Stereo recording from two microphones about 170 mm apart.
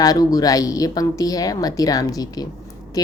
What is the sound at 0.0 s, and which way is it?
A woman's voice, 20° left (ahead or behind).